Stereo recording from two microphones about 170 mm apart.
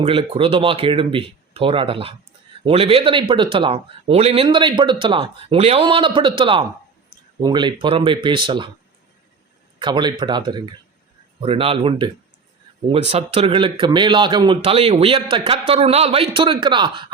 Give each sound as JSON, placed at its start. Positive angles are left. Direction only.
{"t": 0.0, "sound": "speech", "side_deg": -30}
{"t": 9.7, "sound": "speech", "side_deg": -25}